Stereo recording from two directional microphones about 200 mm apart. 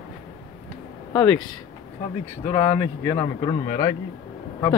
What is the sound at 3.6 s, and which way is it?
Speech, 35° left (ahead or behind).